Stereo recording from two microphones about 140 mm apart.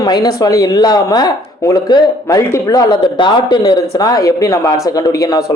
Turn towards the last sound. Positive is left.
turn(degrees=25)  # may be behind; listen again after turning